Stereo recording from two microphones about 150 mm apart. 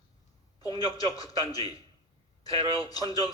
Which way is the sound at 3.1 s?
25° left (ahead or behind).